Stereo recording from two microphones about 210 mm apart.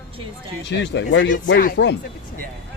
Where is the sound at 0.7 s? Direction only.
55° left (ahead or behind).